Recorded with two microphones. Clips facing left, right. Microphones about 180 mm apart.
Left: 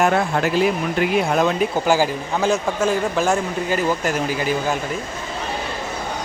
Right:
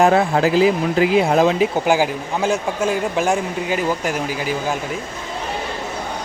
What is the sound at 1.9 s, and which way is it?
Speech, 10° right (ahead or behind).